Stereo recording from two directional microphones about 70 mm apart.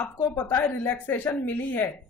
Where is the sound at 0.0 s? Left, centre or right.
Left.